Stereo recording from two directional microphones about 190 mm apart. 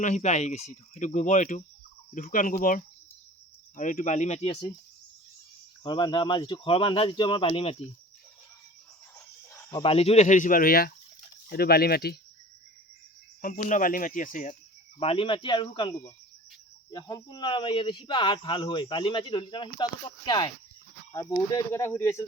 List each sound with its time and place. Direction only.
0.0 s speech: 40° left (ahead or behind)
5.8 s speech: 25° left (ahead or behind)
9.5 s cricket: 15° left (ahead or behind)
9.8 s speech: 30° left (ahead or behind); by 12.1 s 55° left (ahead or behind)
13.4 s speech: 40° left (ahead or behind)
14.9 s speech: 30° left (ahead or behind); by 22.2 s 10° left (ahead or behind)